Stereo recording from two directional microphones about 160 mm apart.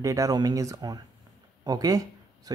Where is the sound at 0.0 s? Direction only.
20° right (ahead or behind).